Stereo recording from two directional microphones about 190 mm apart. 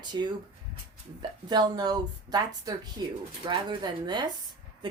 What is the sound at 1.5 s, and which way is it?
Speech, 20° right (ahead or behind).